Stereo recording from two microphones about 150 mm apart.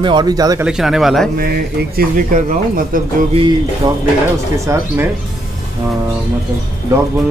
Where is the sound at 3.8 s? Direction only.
30° right (ahead or behind).